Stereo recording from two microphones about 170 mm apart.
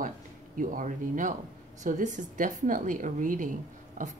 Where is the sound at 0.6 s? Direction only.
50° right (ahead or behind).